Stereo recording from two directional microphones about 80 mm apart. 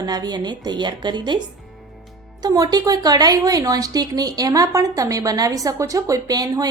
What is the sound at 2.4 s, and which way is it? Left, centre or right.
A woman's voice, right.